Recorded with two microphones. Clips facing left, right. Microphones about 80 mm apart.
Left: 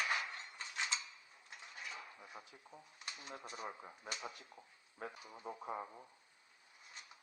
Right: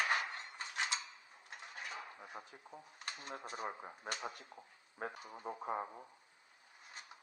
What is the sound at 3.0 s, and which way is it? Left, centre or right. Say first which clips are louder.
Speech: right 3 dB; right.